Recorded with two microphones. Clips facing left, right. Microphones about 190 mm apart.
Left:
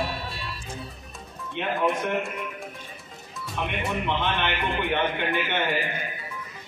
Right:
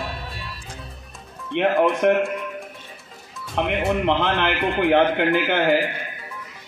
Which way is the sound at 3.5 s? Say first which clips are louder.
Right 8 dB; 90° right.